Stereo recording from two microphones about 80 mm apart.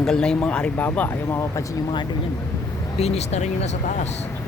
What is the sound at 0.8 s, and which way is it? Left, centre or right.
Speech, left.